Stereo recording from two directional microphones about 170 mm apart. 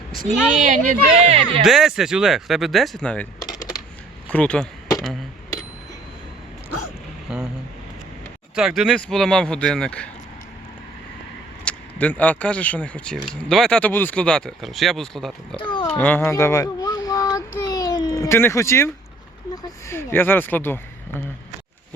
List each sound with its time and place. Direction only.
0.3 s speech: 5° right (ahead or behind)
0.6 s speech: 45° right (ahead or behind)
1.6 s speech: centre (ahead or behind)
4.3 s speech: 5° left (ahead or behind)
7.3 s speech: 5° right (ahead or behind)
8.5 s speech: centre (ahead or behind)
11.6 s speech: 10° left (ahead or behind)
15.7 s speech: 30° left (ahead or behind)
16.0 s child singing: 10° left (ahead or behind)
19.6 s speech: 15° left (ahead or behind)